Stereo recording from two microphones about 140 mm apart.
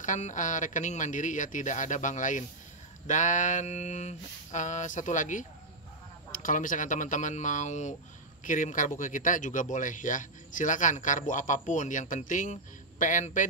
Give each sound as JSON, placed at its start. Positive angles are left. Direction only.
{"t": 0.0, "sound": "speech", "side_deg": 65}